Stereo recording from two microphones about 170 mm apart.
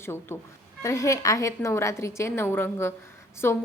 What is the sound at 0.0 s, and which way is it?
A woman's voice, 15° left (ahead or behind).